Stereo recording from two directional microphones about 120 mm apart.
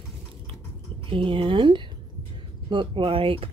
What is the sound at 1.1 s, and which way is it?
Speech, 45° right (ahead or behind).